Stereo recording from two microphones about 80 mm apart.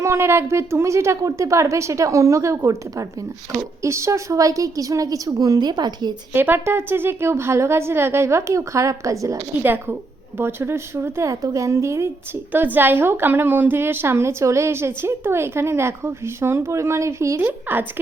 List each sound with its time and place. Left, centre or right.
0.0 s a woman's voice: right
6.3 s a woman's voice: right
9.6 s a woman's voice: right
12.5 s a woman's voice: right
17.4 s a woman's voice: right